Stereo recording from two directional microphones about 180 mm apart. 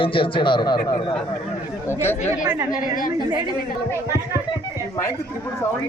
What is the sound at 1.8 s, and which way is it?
Speech, 15° left (ahead or behind).